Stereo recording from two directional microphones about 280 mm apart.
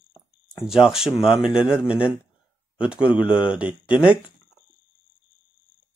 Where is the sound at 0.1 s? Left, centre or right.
Centre.